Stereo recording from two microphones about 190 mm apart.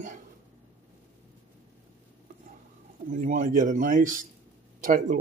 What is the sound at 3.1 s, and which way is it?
A man's voice, 45° right (ahead or behind).